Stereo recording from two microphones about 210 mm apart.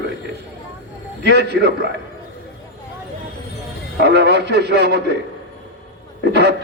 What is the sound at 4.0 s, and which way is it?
A man's voice, 50° right (ahead or behind).